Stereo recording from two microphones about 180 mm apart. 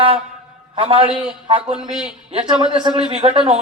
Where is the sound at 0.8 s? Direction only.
30° right (ahead or behind).